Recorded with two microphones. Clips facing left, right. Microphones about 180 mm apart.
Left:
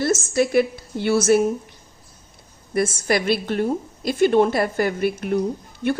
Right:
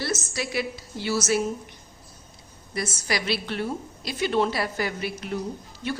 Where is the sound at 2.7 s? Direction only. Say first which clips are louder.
Left 8 dB; 55° left (ahead or behind).